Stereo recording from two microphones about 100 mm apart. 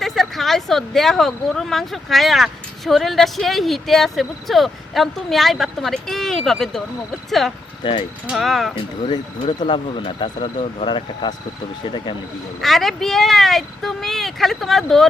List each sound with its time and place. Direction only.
0.0 s speech: centre (ahead or behind)
8.7 s speech: 45° left (ahead or behind); by 10.8 s 75° left (ahead or behind)
10.8 s speech: 50° left (ahead or behind)
12.6 s speech: centre (ahead or behind)